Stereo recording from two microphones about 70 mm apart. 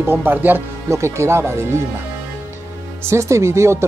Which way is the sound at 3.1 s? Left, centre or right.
Right.